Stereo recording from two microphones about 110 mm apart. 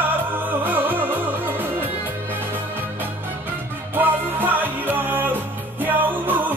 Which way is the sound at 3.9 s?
20° right (ahead or behind).